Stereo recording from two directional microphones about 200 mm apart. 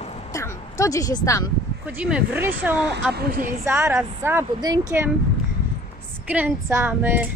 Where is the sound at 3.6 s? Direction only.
10° right (ahead or behind).